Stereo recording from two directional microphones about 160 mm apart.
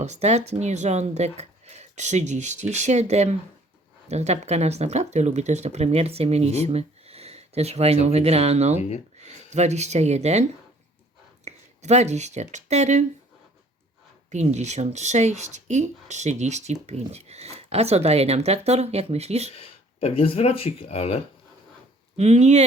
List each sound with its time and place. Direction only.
0.0 s a woman's voice: 45° right (ahead or behind)
11.4 s speech: 45° right (ahead or behind)
14.3 s a woman's voice: 45° right (ahead or behind)
19.5 s speech: 35° left (ahead or behind)
22.2 s a woman's voice: 45° right (ahead or behind)